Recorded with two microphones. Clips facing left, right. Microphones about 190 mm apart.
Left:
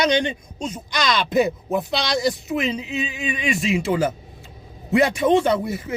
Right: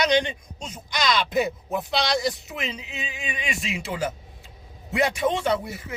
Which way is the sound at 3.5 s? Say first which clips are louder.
Left 11 dB; 30° left (ahead or behind).